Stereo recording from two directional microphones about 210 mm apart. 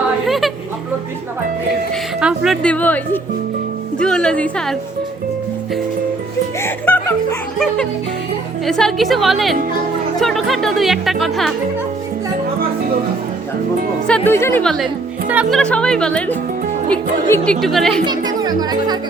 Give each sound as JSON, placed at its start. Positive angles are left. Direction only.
{"t": 0.3, "sound": "a sound", "side_deg": 0}
{"t": 2.2, "sound": "speech", "side_deg": 0}
{"t": 6.6, "sound": "speech", "side_deg": 10}
{"t": 14.3, "sound": "speech", "side_deg": 10}
{"t": 18.0, "sound": "speech", "side_deg": -20}